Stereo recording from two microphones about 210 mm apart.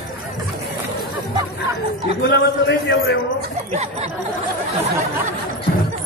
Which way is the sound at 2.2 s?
55° left (ahead or behind).